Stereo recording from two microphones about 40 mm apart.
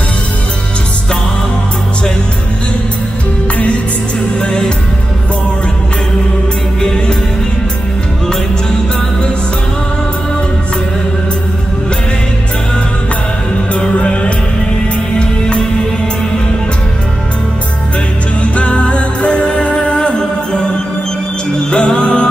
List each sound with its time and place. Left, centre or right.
4.4 s music: centre
6.8 s music: centre
13.7 s music: left
18.4 s music: left
21.6 s music: left